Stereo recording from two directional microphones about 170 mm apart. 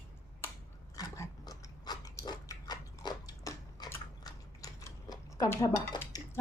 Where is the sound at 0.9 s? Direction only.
20° left (ahead or behind).